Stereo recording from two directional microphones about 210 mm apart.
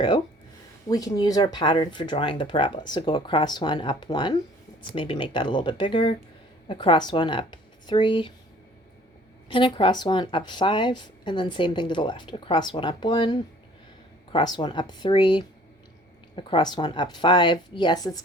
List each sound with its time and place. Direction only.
0.9 s a woman's voice: 20° left (ahead or behind)
9.5 s a woman's voice: 25° left (ahead or behind)